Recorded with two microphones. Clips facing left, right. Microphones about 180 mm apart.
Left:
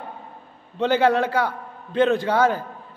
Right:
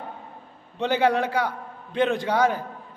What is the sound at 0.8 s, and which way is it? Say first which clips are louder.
A man's voice: left 3 dB; 15° right (ahead or behind).